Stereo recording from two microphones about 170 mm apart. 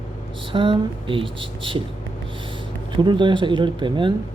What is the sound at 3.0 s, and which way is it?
Speech, 25° right (ahead or behind).